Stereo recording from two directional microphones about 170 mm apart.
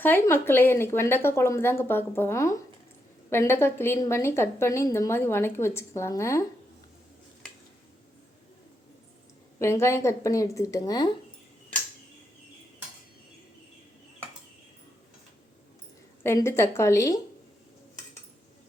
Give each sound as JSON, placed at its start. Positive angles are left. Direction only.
{"t": 0.0, "sound": "a woman's voice", "side_deg": 15}
{"t": 9.6, "sound": "a woman's voice", "side_deg": 15}
{"t": 16.2, "sound": "a woman's voice", "side_deg": 15}